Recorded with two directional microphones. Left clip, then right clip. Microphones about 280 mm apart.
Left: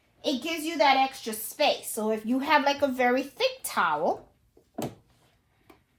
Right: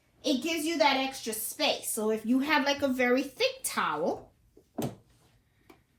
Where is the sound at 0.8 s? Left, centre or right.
Left.